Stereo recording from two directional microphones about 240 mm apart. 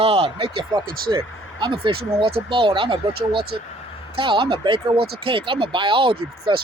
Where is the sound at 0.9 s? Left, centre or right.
Right.